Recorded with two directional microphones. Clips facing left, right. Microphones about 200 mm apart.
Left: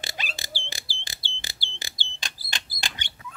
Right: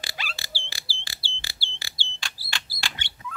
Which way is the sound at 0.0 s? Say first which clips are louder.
Left 1 dB; 20° left (ahead or behind).